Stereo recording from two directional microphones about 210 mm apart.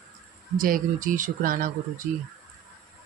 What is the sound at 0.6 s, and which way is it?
Speech, 40° right (ahead or behind).